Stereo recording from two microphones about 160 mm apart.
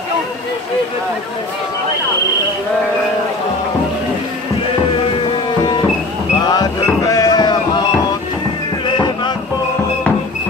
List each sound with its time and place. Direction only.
6.4 s music: 25° left (ahead or behind)
8.8 s music: 30° left (ahead or behind)